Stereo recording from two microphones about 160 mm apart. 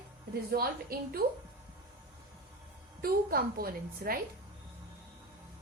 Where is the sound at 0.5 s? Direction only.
65° right (ahead or behind).